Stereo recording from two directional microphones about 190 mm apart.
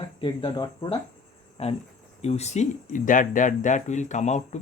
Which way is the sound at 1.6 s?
35° left (ahead or behind).